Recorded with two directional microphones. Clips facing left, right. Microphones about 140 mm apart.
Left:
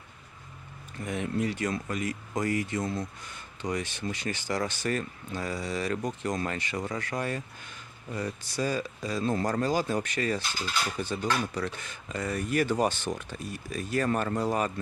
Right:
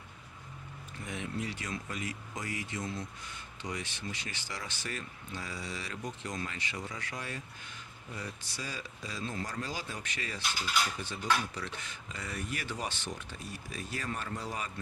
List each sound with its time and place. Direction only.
1.0 s speech: 50° left (ahead or behind)